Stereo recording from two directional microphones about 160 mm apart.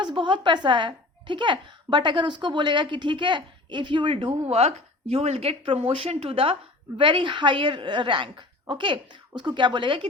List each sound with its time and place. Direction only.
0.0 s a woman's voice: 30° right (ahead or behind)